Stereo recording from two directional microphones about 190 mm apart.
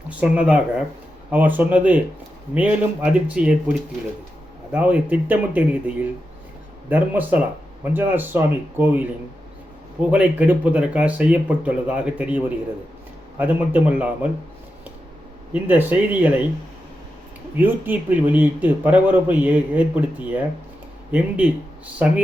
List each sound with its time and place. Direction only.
0.2 s a man's voice: 5° right (ahead or behind)
6.9 s a man's voice: 10° right (ahead or behind)
10.1 s a man's voice: 10° right (ahead or behind)
15.5 s a man's voice: 10° right (ahead or behind)
17.6 s a man's voice: 10° right (ahead or behind)